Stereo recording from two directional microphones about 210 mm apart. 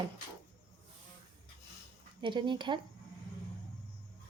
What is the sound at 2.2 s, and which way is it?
Speech, 20° right (ahead or behind).